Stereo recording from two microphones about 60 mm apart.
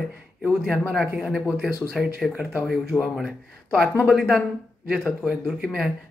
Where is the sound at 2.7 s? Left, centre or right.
Centre.